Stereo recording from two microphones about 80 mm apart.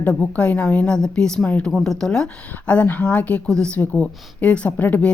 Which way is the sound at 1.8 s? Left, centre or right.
Centre.